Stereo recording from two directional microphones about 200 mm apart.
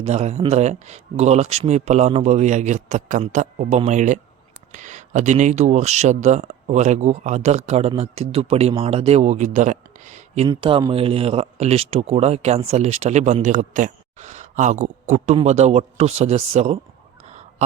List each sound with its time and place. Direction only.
0.0 s speech: 35° right (ahead or behind)